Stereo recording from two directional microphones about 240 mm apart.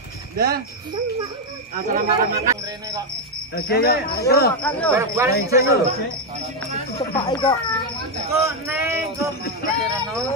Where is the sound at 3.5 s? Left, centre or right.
Left.